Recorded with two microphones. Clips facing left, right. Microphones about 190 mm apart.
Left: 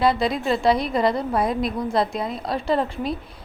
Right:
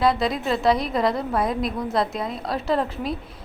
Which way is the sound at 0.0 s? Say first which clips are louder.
Left 1 dB; centre (ahead or behind).